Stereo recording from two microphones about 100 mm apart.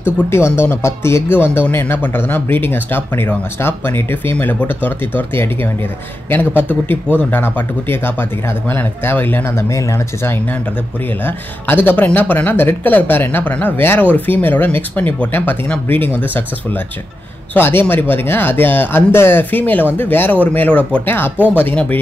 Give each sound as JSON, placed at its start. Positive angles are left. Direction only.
{"t": 0.0, "sound": "speech", "side_deg": 25}